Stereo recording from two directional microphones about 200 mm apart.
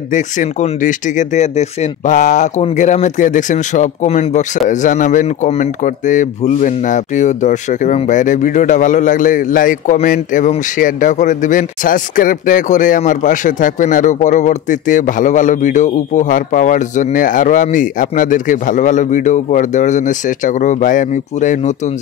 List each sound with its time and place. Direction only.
0.1 s speech: 40° left (ahead or behind)